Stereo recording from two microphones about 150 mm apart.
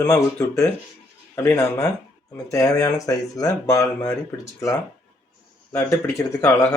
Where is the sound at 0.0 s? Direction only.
15° left (ahead or behind).